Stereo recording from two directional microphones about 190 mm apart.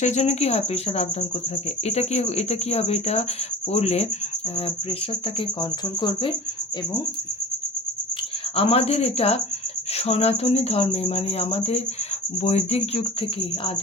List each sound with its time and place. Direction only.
0.0 s cricket: 35° left (ahead or behind)
6.0 s speech: 25° left (ahead or behind)
8.5 s cricket: 30° left (ahead or behind)